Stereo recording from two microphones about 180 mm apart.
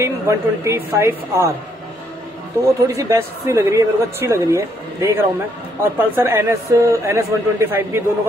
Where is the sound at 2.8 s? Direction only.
15° right (ahead or behind).